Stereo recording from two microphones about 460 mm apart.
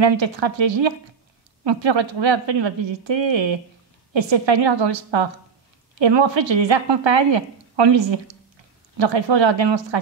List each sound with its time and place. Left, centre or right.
0.0 s a woman's voice: right